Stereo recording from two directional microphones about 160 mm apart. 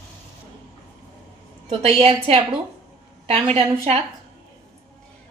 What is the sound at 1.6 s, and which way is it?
A woman's voice, 35° right (ahead or behind).